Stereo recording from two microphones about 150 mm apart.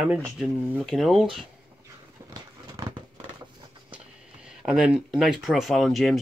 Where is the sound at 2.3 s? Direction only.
30° right (ahead or behind).